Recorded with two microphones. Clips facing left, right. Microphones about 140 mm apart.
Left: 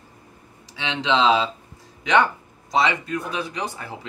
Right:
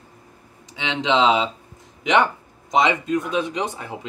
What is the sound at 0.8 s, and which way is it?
Speech, 20° right (ahead or behind).